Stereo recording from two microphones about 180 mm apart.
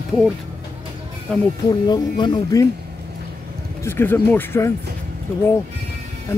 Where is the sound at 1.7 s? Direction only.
25° left (ahead or behind).